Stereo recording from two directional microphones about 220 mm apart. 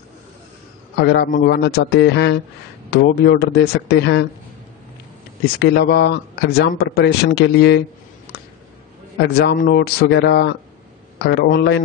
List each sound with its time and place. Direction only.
0.9 s speech: 50° left (ahead or behind)
5.4 s speech: 50° left (ahead or behind)
9.2 s speech: 50° left (ahead or behind)